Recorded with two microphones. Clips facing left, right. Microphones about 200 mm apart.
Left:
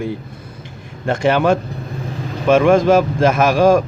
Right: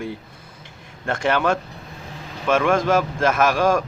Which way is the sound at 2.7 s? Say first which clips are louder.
Left 7 dB; 10° left (ahead or behind).